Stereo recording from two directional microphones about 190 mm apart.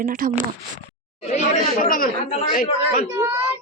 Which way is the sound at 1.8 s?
45° left (ahead or behind).